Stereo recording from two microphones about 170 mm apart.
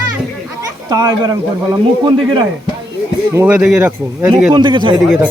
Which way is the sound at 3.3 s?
10° right (ahead or behind).